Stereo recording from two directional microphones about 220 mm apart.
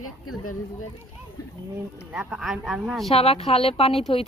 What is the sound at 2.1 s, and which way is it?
A woman's voice, 5° right (ahead or behind).